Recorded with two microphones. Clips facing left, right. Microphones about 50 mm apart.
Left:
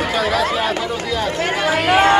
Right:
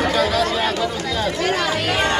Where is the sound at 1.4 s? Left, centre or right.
Left.